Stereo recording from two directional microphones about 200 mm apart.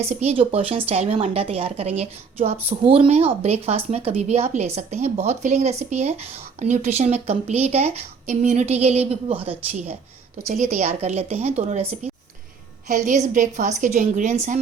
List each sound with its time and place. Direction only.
0.0 s speech: 30° right (ahead or behind)